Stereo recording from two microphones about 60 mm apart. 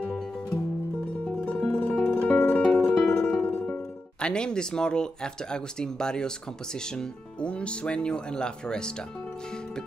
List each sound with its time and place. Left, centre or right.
1.2 s music: left
4.2 s speech: centre